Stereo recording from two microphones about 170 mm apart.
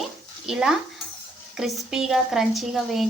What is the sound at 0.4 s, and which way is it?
Speech, 5° right (ahead or behind).